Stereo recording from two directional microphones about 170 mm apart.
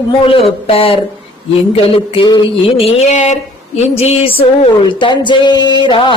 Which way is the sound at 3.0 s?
40° left (ahead or behind).